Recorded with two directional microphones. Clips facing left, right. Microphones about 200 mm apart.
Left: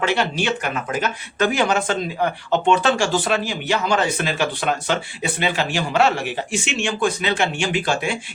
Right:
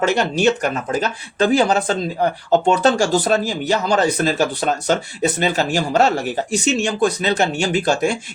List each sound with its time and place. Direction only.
0.0 s speech: 45° right (ahead or behind)